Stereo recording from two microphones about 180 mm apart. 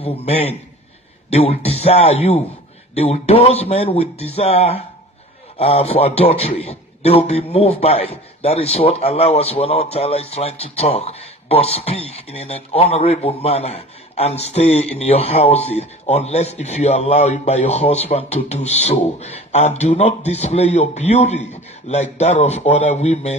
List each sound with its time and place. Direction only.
0.0 s a man's voice: 35° left (ahead or behind)